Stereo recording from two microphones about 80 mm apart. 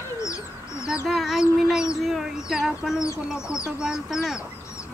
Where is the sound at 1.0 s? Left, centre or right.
Centre.